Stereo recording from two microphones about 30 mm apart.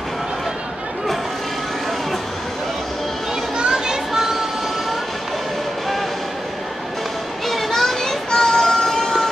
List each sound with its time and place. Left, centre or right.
3.7 s children playing: centre
7.4 s children playing: centre
8.3 s child singing: left
8.5 s synthetic singing: centre